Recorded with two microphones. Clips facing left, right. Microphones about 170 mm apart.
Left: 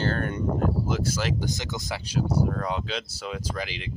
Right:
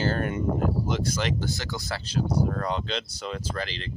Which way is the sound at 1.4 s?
20° left (ahead or behind).